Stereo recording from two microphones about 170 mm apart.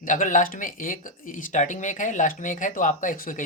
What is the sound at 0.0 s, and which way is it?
Speech, 50° left (ahead or behind).